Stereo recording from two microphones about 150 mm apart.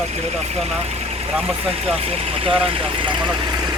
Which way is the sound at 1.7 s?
40° right (ahead or behind).